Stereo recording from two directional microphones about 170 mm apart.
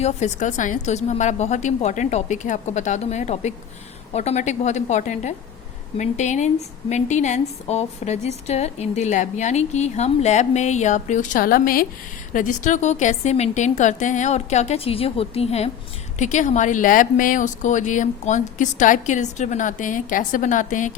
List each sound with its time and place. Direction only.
0.0 s a woman's voice: 45° left (ahead or behind)